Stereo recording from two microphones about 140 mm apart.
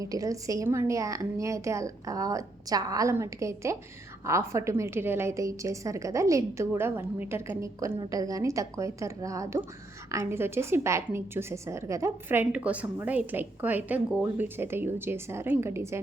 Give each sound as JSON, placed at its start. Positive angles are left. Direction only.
{"t": 0.0, "sound": "a woman's voice", "side_deg": -25}